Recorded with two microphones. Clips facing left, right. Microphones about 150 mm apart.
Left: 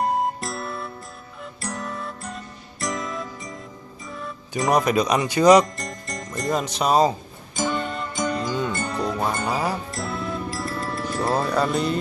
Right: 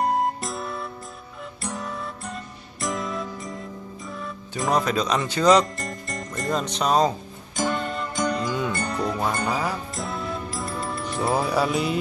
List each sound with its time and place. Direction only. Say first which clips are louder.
0.0 s music: even; centre (ahead or behind)
4.6 s speech: left 3 dB; 15° left (ahead or behind)
5.8 s music: right 1 dB; centre (ahead or behind)